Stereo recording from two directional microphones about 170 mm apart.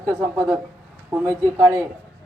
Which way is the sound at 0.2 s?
15° right (ahead or behind).